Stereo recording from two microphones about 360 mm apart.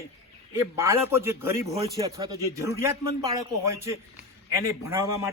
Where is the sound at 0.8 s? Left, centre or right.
Centre.